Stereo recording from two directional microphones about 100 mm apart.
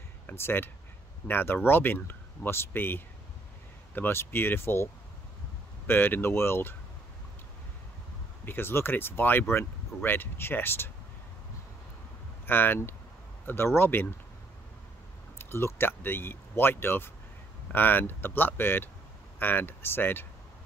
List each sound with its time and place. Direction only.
0.3 s speech: 20° left (ahead or behind)
5.9 s speech: 20° left (ahead or behind)
8.5 s speech: 25° left (ahead or behind)
12.4 s speech: 20° left (ahead or behind)
15.3 s speech: 20° left (ahead or behind)